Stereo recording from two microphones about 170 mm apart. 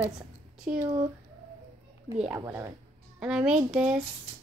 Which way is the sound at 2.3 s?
15° right (ahead or behind).